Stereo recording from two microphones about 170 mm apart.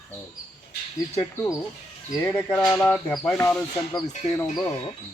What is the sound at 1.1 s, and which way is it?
Speech, 20° left (ahead or behind).